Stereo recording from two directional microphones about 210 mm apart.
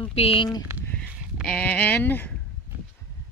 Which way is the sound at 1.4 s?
5° left (ahead or behind).